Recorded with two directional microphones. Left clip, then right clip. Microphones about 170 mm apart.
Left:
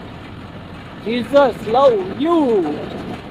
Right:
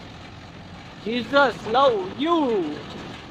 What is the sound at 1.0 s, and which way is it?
Speech, centre (ahead or behind).